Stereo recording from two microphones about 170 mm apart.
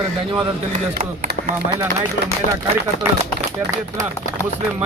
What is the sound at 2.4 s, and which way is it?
Speech, 55° left (ahead or behind).